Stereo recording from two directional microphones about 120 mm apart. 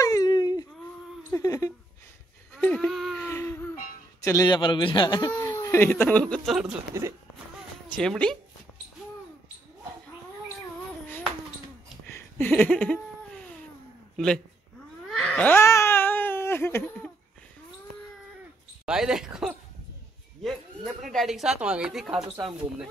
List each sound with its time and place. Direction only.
0.0 s a sound: 30° left (ahead or behind)
2.6 s a sound: 5° left (ahead or behind)
3.2 s a sound: 20° left (ahead or behind)
4.2 s a man's voice: 25° left (ahead or behind)
4.5 s a man's voice: 40° left (ahead or behind)
5.3 s speech: 20° left (ahead or behind)
6.5 s a woman's voice: 5° right (ahead or behind)
7.9 s a woman's voice: 5° left (ahead or behind)
12.1 s a sound: 15° left (ahead or behind)
14.1 s a man's voice: 5° left (ahead or behind)
15.0 s baby cry: 5° left (ahead or behind)
18.9 s a woman's voice: 5° right (ahead or behind)
21.1 s a woman's voice: centre (ahead or behind)